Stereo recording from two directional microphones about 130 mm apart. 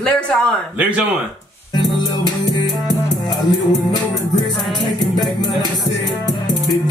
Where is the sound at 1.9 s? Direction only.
35° left (ahead or behind).